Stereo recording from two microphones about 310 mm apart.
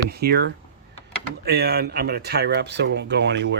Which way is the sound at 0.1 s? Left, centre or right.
Right.